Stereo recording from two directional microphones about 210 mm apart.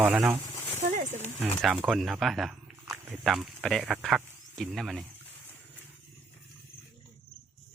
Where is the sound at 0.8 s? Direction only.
35° right (ahead or behind).